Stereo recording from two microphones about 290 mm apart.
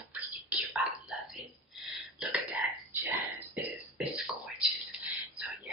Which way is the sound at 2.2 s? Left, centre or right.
Centre.